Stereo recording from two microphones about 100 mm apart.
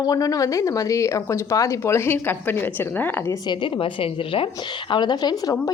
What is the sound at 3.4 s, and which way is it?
A woman's voice, 55° left (ahead or behind).